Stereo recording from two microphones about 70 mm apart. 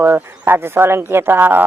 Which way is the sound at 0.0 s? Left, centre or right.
Right.